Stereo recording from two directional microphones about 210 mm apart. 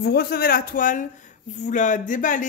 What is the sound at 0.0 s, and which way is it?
Speech, 50° left (ahead or behind).